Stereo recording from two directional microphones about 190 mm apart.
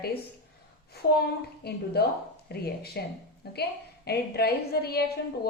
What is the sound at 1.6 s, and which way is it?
A woman's voice, 55° left (ahead or behind).